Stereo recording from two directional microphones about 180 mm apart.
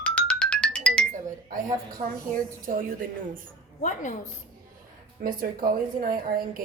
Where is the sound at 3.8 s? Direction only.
45° left (ahead or behind).